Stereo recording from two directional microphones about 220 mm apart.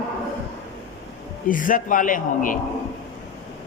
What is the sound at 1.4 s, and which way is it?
A man's voice, 40° left (ahead or behind).